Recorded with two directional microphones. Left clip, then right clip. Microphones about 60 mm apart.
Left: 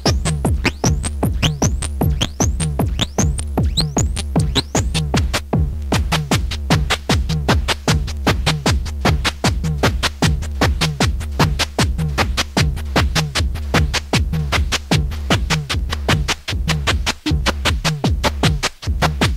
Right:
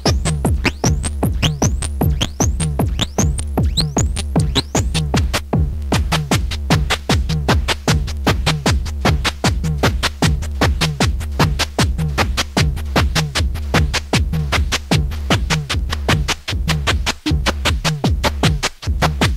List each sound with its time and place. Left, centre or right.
0.0 s music: right